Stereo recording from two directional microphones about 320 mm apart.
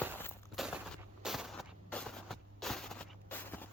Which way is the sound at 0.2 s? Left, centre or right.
Centre.